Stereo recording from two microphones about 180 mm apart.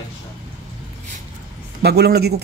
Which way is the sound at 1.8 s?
65° right (ahead or behind).